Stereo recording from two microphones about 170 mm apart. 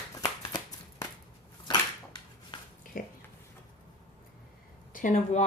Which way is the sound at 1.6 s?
25° left (ahead or behind).